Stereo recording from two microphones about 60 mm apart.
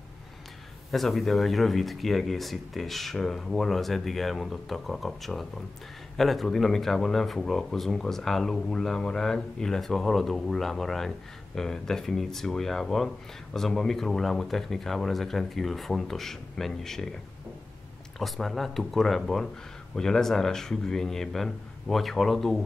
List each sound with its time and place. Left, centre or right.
0.9 s speech: centre
18.2 s speech: centre